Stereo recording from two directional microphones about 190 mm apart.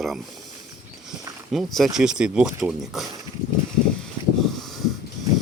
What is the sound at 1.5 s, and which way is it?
Speech, centre (ahead or behind).